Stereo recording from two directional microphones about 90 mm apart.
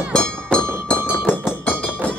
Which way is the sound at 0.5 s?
10° left (ahead or behind).